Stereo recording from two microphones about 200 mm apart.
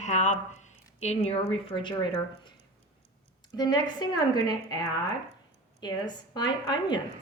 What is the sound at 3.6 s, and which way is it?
A woman's voice, 20° left (ahead or behind).